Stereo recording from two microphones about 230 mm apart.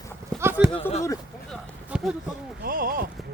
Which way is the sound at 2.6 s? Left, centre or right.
Right.